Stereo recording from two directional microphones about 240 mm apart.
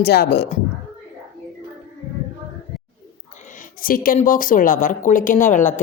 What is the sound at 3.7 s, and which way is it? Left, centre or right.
Speech, left.